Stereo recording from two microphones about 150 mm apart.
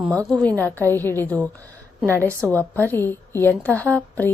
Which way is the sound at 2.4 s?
20° right (ahead or behind).